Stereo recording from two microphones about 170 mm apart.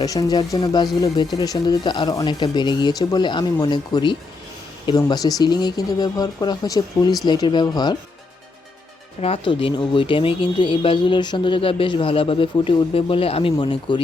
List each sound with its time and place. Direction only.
0.0 s speech: 20° left (ahead or behind)
9.2 s speech: 30° left (ahead or behind)